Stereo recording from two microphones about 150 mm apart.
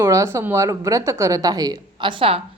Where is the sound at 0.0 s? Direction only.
20° right (ahead or behind).